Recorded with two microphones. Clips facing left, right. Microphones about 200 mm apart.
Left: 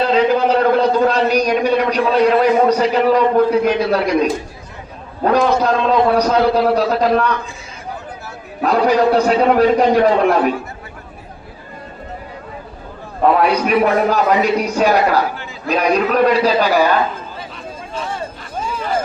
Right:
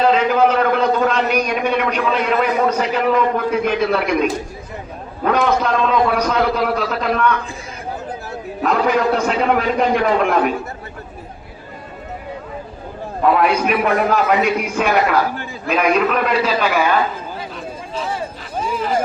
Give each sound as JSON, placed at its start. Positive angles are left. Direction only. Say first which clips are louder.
{"t": 0.1, "sound": "a man's voice", "louder": "left 1 dB", "side_deg": 35}
{"t": 8.6, "sound": "a man's voice", "louder": "left 3 dB", "side_deg": 35}
{"t": 13.7, "sound": "a man's voice", "louder": "left 2 dB", "side_deg": 35}
{"t": 17.9, "sound": "a sound", "louder": "right 1 dB", "side_deg": 0}